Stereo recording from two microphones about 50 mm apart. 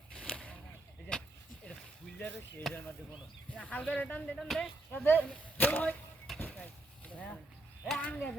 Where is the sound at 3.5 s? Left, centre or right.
Left.